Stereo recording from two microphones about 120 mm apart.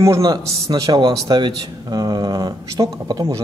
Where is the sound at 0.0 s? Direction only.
30° right (ahead or behind).